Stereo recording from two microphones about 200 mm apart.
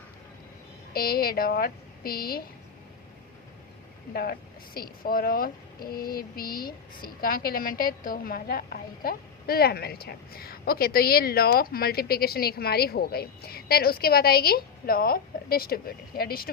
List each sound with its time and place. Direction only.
0.9 s speech: 50° left (ahead or behind)
4.1 s speech: 50° left (ahead or behind)